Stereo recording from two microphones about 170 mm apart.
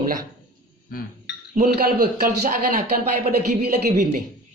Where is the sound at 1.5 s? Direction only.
55° right (ahead or behind).